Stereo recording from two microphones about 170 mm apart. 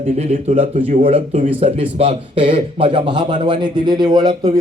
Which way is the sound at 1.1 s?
35° right (ahead or behind).